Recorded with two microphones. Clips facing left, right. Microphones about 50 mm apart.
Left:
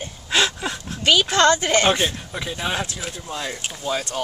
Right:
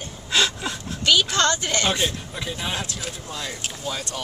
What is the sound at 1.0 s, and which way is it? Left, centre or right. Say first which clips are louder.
A woman's voice: left 4 dB; left.